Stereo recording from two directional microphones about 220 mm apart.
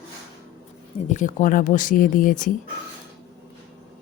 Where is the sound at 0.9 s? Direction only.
35° left (ahead or behind).